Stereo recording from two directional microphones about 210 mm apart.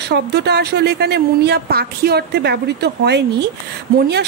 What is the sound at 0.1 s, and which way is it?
A woman's voice, 50° right (ahead or behind).